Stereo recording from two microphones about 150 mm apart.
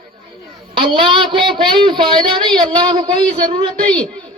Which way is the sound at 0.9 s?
35° right (ahead or behind).